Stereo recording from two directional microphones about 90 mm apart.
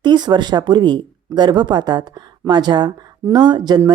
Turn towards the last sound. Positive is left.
turn(degrees=-50)  # may be behind; listen again after turning